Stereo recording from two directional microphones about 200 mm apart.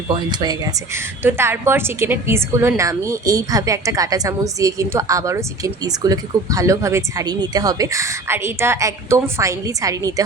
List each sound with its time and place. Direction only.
0.3 s a woman's voice: 20° right (ahead or behind)